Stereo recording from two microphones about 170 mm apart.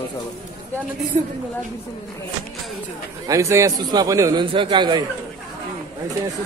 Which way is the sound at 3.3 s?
15° right (ahead or behind).